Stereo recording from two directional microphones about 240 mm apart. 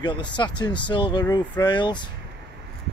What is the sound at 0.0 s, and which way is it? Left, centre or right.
Speech, centre.